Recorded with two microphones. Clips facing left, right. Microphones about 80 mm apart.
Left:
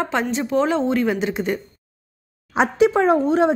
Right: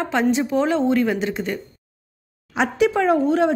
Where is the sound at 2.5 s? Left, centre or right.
Left.